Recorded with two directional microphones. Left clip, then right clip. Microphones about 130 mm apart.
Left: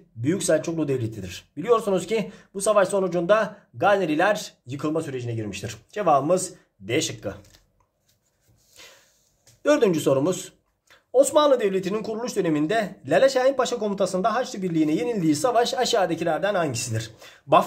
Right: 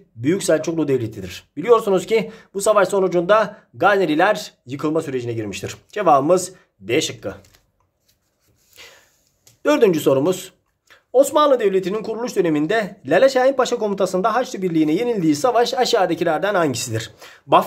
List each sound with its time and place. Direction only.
0.2 s speech: 35° right (ahead or behind)
7.0 s speech: 25° right (ahead or behind)
9.6 s speech: 30° right (ahead or behind); by 17.6 s 45° right (ahead or behind)